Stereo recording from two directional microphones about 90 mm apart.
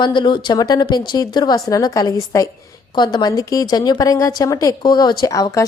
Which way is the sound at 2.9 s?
55° left (ahead or behind).